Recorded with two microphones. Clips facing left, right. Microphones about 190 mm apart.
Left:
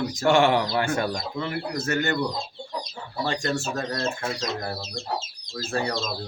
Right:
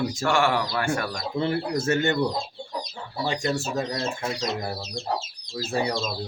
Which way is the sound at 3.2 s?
15° right (ahead or behind).